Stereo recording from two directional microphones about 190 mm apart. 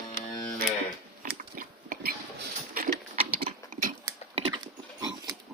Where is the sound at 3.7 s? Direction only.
45° right (ahead or behind).